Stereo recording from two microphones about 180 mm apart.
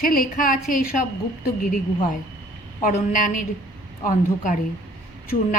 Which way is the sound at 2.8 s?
45° left (ahead or behind).